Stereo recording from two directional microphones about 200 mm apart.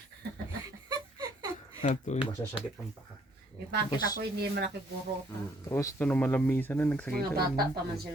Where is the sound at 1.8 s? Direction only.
35° left (ahead or behind).